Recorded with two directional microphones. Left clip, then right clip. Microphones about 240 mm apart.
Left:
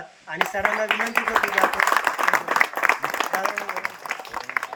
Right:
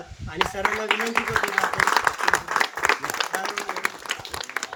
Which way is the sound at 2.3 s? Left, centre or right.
Centre.